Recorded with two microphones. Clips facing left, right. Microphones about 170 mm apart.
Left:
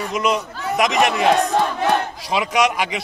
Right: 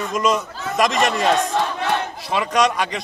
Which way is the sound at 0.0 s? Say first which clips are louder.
Right 1 dB; 10° left (ahead or behind).